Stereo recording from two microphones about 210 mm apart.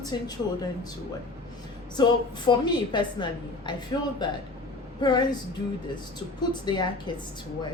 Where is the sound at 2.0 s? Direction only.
20° left (ahead or behind).